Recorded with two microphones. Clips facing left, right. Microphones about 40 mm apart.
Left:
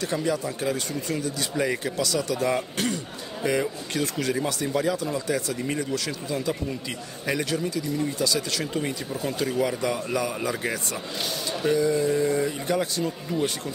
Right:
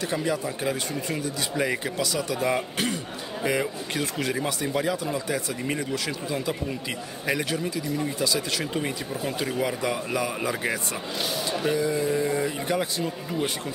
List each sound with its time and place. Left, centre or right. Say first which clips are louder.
0.0 s speech: left 1 dB; right
11.2 s a sound: even; centre
11.7 s speech: left 4 dB; right